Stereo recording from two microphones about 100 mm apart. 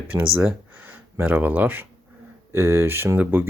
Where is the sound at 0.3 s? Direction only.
15° right (ahead or behind).